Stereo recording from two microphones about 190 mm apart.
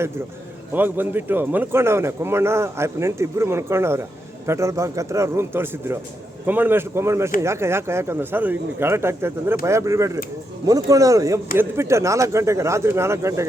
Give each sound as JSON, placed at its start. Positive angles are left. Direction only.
{"t": 0.7, "sound": "a man's voice", "side_deg": -10}